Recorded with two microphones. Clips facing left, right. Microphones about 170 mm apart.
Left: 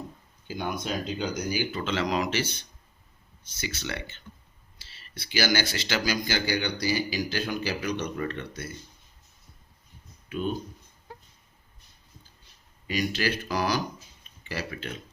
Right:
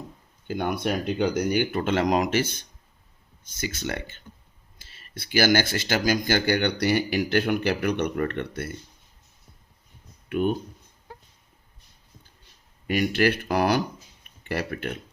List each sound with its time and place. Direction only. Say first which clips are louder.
0.4 s speech: right 5 dB; 60° right (ahead or behind)
10.2 s speech: right 6 dB; 60° right (ahead or behind)
12.9 s speech: right 6 dB; 55° right (ahead or behind)